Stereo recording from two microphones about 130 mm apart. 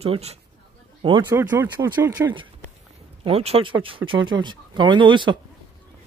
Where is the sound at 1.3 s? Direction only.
20° right (ahead or behind).